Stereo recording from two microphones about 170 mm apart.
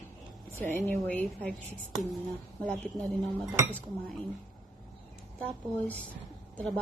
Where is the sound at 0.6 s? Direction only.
10° left (ahead or behind).